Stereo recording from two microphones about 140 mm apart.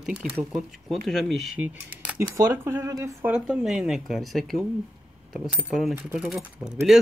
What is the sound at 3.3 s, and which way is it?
Speech, 5° right (ahead or behind).